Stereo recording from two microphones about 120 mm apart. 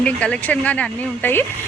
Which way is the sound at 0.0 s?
10° left (ahead or behind).